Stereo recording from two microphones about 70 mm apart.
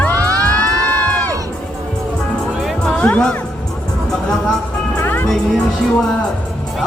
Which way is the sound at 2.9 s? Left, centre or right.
Centre.